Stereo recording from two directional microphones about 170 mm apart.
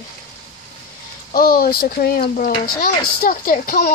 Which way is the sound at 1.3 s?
60° left (ahead or behind).